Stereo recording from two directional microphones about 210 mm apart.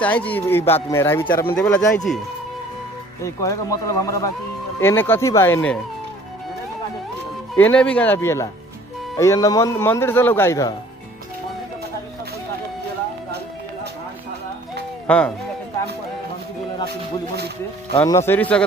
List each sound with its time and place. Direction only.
0.0 s speech: 5° left (ahead or behind)
3.2 s speech: 15° left (ahead or behind)
7.5 s speech: 5° left (ahead or behind)
15.0 s speech: 5° left (ahead or behind)
18.0 s speech: 15° left (ahead or behind)